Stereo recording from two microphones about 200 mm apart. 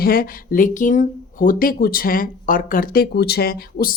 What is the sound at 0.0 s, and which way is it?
Speech, 45° left (ahead or behind).